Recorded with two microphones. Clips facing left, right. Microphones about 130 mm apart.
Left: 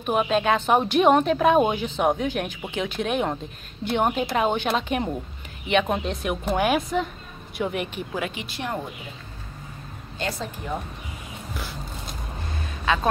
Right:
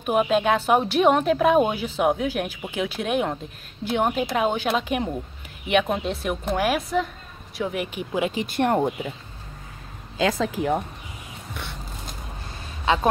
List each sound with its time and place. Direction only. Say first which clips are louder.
0.0 s a woman's voice: right 2 dB; 5° right (ahead or behind)
8.4 s speech: right 9 dB; 50° right (ahead or behind)
10.1 s speech: right 8 dB; 85° right
11.5 s a sound: left 1 dB; centre (ahead or behind)
12.8 s speech: right 2 dB; 25° right (ahead or behind)